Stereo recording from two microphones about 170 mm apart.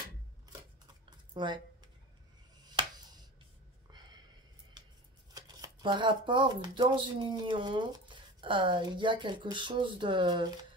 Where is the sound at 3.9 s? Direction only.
25° right (ahead or behind).